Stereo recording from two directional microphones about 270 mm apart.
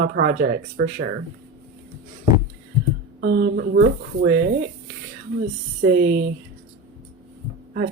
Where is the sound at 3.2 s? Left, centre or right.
Right.